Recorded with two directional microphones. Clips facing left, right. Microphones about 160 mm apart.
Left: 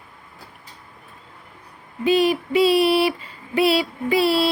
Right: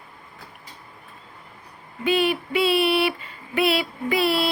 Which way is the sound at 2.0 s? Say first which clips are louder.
Left 4 dB; 35° left (ahead or behind).